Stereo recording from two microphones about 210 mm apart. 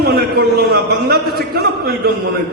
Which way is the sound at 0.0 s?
50° right (ahead or behind).